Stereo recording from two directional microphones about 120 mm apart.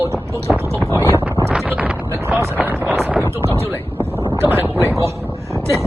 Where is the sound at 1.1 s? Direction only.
20° right (ahead or behind).